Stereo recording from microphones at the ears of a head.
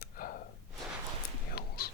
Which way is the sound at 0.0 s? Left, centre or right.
Left.